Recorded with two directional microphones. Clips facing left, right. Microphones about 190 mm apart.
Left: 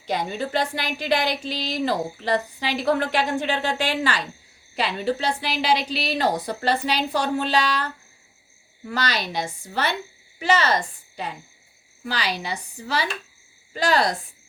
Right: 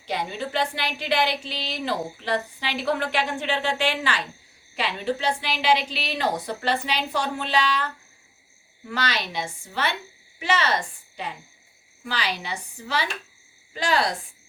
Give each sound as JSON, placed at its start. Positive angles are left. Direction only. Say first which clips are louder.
{"t": 0.1, "sound": "a woman's voice", "louder": "left 3 dB", "side_deg": 45}
{"t": 8.9, "sound": "a woman's voice", "louder": "left 2 dB", "side_deg": 40}